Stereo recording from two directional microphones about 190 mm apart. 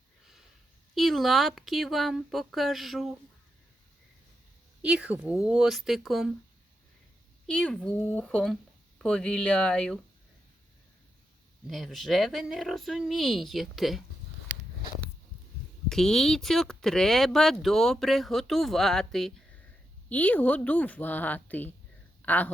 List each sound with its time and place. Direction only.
0.9 s speech: centre (ahead or behind)
4.8 s speech: 5° right (ahead or behind)
7.4 s speech: 5° left (ahead or behind)
11.7 s speech: centre (ahead or behind)
15.9 s a woman's voice: centre (ahead or behind)